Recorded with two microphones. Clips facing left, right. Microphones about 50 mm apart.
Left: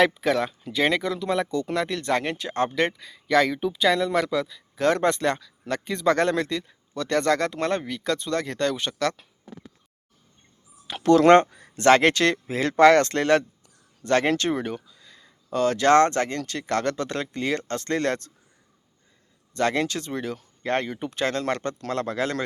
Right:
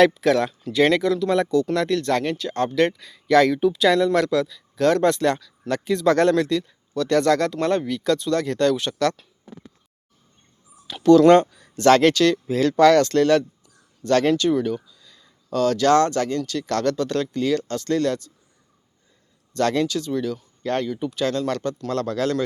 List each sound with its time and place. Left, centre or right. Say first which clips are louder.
0.0 s speech: right 4 dB; centre; by 2.7 s left
2.7 s speech: right 4 dB; centre
10.9 s speech: right 3 dB; left
14.3 s a sound: right 5 dB; left
15.4 s speech: right 1 dB; left
19.7 s speech: right 4 dB; left
21.9 s speech: right 3 dB; left